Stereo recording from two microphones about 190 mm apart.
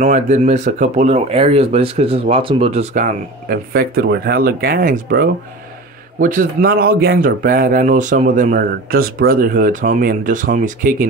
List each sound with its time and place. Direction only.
0.0 s speech: 40° right (ahead or behind)